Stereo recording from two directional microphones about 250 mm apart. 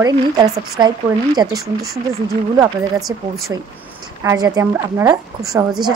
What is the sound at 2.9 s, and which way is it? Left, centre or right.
Speech, centre.